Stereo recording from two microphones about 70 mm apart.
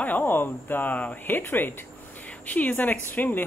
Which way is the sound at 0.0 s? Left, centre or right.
Left.